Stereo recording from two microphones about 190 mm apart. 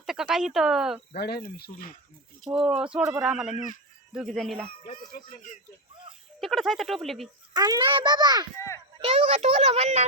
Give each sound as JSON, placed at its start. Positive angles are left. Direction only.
{"t": 0.0, "sound": "speech", "side_deg": 0}
{"t": 1.2, "sound": "speech", "side_deg": 55}
{"t": 2.4, "sound": "speech", "side_deg": -5}
{"t": 6.4, "sound": "speech", "side_deg": 0}
{"t": 7.5, "sound": "a child's voice", "side_deg": -20}
{"t": 8.5, "sound": "speech", "side_deg": 15}
{"t": 9.0, "sound": "a child's voice", "side_deg": -35}